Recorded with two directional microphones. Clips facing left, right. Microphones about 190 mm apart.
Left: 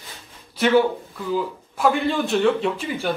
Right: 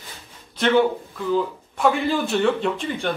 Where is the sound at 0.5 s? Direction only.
5° left (ahead or behind).